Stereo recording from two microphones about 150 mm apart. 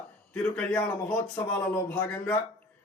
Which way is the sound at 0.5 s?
10° left (ahead or behind).